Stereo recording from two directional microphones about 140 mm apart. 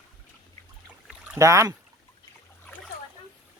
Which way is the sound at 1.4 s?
20° right (ahead or behind).